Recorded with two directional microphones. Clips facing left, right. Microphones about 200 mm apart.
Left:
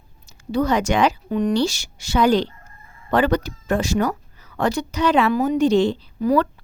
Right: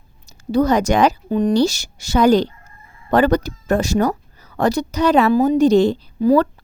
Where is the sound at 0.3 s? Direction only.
40° right (ahead or behind).